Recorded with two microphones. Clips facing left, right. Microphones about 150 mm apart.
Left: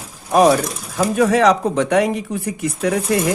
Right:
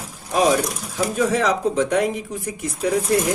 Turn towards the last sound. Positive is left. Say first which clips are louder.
# left 2 dB
turn(degrees=70)  # may be behind; listen again after turning